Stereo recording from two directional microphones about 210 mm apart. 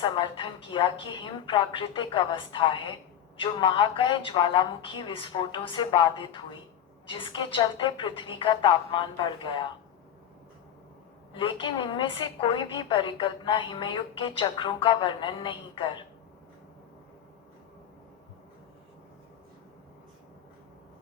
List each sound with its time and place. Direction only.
0.0 s a woman's voice: 25° left (ahead or behind)
11.3 s a woman's voice: 25° left (ahead or behind)